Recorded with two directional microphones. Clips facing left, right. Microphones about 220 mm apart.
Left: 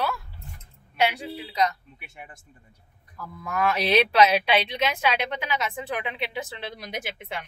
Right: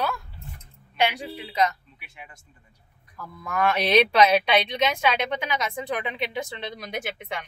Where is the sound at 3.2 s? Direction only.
Centre (ahead or behind).